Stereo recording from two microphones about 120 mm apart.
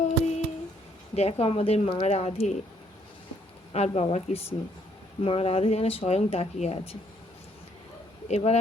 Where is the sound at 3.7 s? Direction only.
60° left (ahead or behind).